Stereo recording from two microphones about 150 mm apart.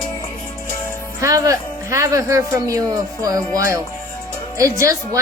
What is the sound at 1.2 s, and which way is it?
Speech, 20° right (ahead or behind).